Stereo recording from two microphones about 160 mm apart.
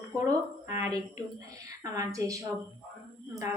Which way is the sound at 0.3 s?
15° right (ahead or behind).